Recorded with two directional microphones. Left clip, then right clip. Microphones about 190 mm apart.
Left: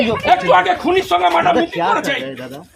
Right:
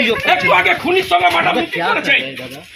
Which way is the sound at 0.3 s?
15° left (ahead or behind).